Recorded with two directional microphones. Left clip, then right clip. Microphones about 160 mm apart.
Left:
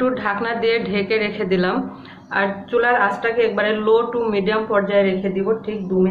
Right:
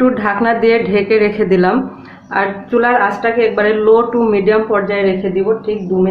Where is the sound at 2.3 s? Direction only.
70° right (ahead or behind).